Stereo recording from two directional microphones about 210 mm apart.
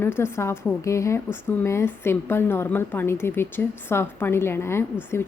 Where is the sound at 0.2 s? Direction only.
10° left (ahead or behind).